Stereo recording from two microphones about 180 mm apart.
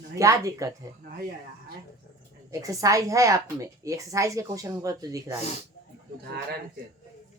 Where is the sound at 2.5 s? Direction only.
20° right (ahead or behind).